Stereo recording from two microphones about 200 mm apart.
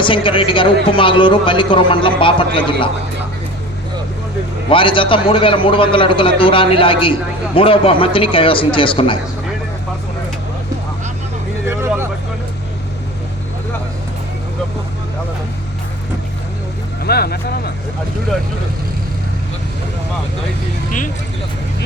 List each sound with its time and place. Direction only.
0.0 s a man's voice: 25° left (ahead or behind)
4.7 s a man's voice: 25° left (ahead or behind)
11.6 s vehicle: 10° right (ahead or behind)
17.0 s speech: 50° left (ahead or behind)